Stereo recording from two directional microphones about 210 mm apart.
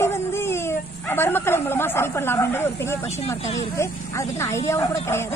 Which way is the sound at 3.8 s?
15° left (ahead or behind).